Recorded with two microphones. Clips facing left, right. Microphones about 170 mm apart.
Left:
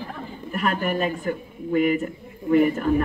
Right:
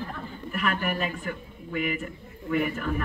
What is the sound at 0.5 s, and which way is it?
A man's voice, 40° left (ahead or behind).